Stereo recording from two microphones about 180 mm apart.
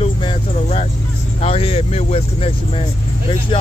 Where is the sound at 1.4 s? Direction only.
35° left (ahead or behind).